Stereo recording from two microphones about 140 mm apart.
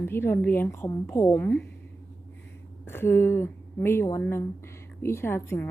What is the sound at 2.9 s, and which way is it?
A woman's voice, 15° left (ahead or behind).